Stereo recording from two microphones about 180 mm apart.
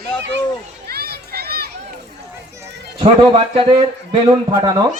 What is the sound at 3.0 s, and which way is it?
A man's voice, 30° right (ahead or behind).